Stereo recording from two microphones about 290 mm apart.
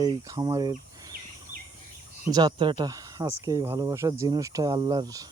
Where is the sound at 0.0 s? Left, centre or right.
Centre.